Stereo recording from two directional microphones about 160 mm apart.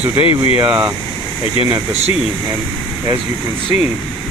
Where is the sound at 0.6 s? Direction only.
10° right (ahead or behind).